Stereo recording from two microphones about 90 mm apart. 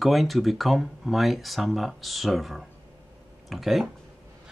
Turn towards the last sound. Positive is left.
turn(degrees=0)  # may be behind; listen again after turning